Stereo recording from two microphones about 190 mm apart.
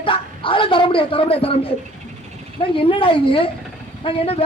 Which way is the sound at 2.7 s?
30° left (ahead or behind).